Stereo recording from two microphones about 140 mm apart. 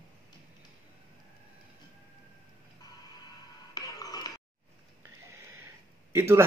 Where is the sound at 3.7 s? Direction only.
25° left (ahead or behind).